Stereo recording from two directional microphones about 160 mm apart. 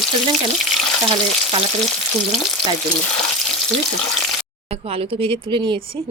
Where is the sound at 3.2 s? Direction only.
5° left (ahead or behind).